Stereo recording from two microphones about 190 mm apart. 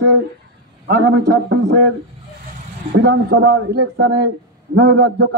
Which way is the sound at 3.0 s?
60° right (ahead or behind).